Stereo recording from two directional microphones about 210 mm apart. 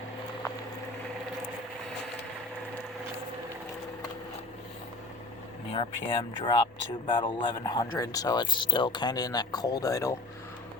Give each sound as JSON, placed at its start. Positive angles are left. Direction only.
{"t": 5.7, "sound": "speech", "side_deg": 25}